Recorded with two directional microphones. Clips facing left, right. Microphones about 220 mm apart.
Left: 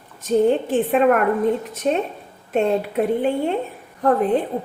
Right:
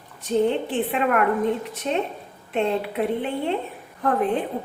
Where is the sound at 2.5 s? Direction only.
45° left (ahead or behind).